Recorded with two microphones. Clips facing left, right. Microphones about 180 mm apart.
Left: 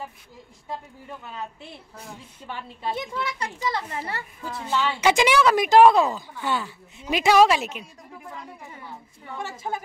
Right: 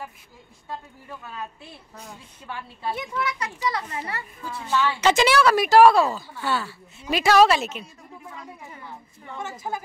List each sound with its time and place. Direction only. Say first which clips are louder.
2.4 s a child's voice: even; 25° left (ahead or behind)
5.0 s a woman's voice: even; 15° left (ahead or behind)